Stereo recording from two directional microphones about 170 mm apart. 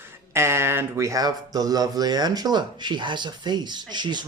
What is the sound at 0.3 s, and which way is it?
A man's voice, 15° right (ahead or behind).